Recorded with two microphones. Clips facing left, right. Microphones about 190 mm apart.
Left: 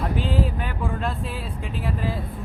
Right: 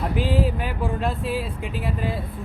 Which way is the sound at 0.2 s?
5° right (ahead or behind).